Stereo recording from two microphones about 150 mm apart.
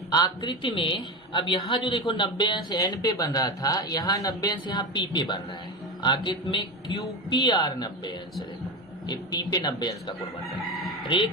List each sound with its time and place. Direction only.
0.1 s a woman's voice: 30° left (ahead or behind)